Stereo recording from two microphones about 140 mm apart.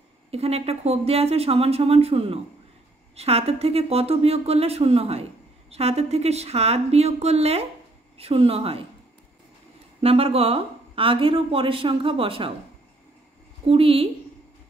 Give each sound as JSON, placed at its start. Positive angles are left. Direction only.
{"t": 0.3, "sound": "speech", "side_deg": -45}
{"t": 10.0, "sound": "a woman's voice", "side_deg": -45}
{"t": 13.7, "sound": "a woman's voice", "side_deg": -40}